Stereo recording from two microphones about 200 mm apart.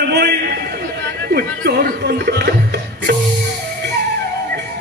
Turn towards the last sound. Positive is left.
turn(degrees=-55)  # may be behind; listen again after turning